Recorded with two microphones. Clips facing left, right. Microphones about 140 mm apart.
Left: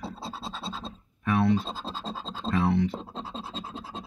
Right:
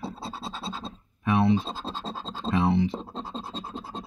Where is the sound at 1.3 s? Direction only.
20° right (ahead or behind).